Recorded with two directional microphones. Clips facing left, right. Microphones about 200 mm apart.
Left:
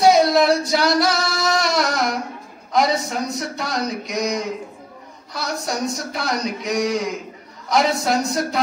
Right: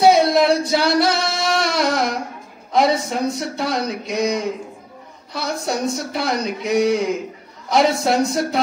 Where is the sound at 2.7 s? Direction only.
30° right (ahead or behind).